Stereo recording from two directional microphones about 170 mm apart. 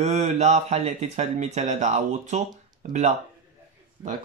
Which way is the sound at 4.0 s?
15° right (ahead or behind).